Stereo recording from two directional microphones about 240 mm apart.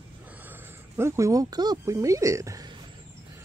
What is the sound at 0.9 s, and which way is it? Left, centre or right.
Speech, centre.